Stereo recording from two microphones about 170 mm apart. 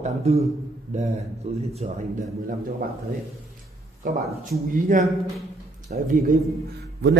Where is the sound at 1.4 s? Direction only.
40° right (ahead or behind).